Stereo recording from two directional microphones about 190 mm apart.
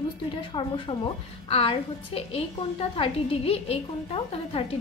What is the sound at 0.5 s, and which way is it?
A woman's voice, 25° left (ahead or behind).